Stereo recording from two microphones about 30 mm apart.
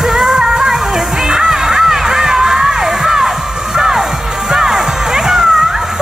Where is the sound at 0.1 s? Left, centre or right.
Centre.